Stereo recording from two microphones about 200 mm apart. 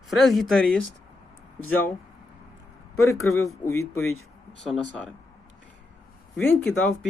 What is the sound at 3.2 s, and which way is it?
Speech, 90° left.